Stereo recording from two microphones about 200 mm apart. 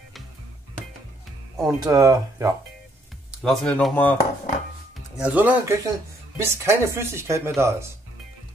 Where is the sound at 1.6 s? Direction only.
20° right (ahead or behind).